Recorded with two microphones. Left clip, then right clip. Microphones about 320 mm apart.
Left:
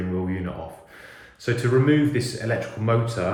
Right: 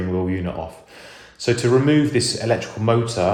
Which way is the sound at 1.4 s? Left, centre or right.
Centre.